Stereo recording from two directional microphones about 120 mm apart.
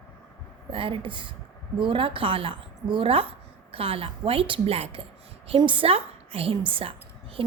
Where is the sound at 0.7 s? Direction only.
45° right (ahead or behind).